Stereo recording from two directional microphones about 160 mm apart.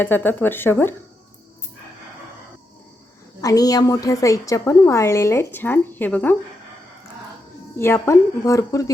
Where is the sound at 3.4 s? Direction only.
20° left (ahead or behind).